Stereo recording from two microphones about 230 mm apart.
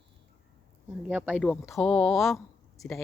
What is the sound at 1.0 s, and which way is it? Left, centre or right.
Speech, centre.